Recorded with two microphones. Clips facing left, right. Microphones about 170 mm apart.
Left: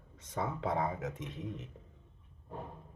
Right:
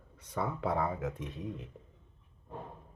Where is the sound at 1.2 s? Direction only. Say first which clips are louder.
Right 2 dB; 20° left (ahead or behind).